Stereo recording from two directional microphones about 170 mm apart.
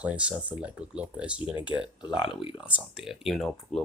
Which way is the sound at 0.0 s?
10° right (ahead or behind).